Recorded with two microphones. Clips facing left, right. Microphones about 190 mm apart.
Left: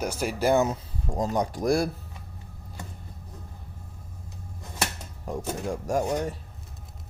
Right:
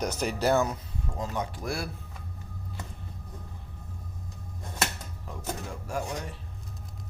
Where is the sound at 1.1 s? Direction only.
40° left (ahead or behind).